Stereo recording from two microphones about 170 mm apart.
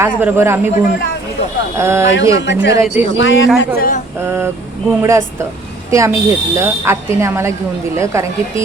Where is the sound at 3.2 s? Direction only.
90° left.